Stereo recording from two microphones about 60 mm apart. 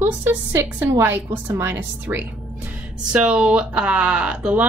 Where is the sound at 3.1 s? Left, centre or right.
Centre.